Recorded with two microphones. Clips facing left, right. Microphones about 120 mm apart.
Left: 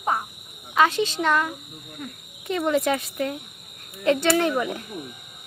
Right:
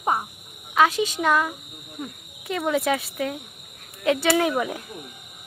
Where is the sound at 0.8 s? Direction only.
5° right (ahead or behind).